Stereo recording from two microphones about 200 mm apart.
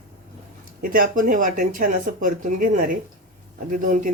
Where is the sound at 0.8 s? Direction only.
45° right (ahead or behind).